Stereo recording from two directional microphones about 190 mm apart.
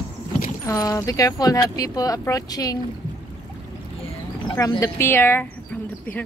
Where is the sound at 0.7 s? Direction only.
20° left (ahead or behind).